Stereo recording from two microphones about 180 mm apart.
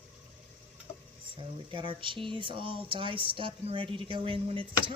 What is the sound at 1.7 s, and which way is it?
Speech, 30° right (ahead or behind).